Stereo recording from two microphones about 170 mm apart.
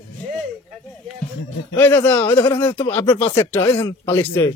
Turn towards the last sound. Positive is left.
turn(degrees=15)  # may be behind; listen again after turning